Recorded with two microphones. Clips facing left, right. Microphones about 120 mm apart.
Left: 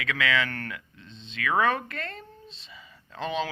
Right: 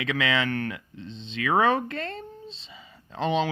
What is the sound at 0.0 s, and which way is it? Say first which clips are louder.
Speech: right 2 dB; 25° right (ahead or behind).